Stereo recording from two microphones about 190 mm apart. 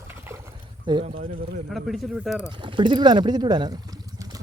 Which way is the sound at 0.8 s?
25° right (ahead or behind).